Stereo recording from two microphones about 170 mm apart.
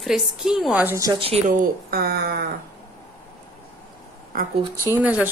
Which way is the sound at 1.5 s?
60° right (ahead or behind).